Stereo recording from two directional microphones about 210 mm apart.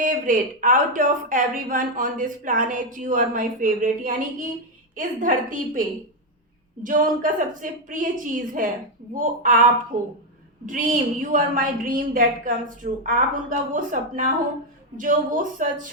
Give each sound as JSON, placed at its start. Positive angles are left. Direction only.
{"t": 0.0, "sound": "speech", "side_deg": -40}
{"t": 6.8, "sound": "speech", "side_deg": -40}